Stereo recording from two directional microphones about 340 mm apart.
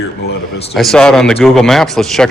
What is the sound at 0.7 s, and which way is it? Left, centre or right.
Speech, centre.